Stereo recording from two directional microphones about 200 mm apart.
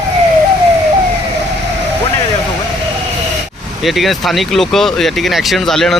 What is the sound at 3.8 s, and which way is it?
Speech, centre (ahead or behind).